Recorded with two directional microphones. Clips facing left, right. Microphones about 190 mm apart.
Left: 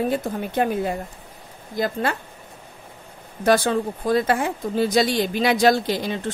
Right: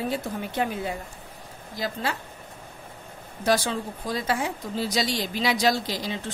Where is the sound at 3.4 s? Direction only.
55° left (ahead or behind).